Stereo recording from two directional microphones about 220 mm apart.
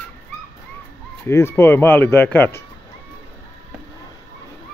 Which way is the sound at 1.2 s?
10° left (ahead or behind).